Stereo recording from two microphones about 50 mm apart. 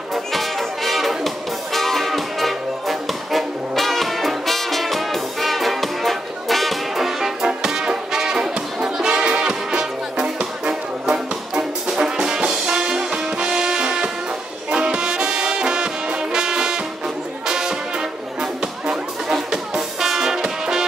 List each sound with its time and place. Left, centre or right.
0.1 s music: centre
14.7 s brass instrument: centre
17.5 s music: centre